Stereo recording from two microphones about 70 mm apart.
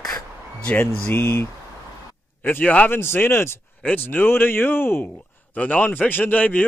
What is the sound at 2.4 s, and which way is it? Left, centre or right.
Speech, left.